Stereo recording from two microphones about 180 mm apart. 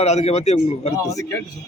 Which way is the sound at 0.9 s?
15° left (ahead or behind).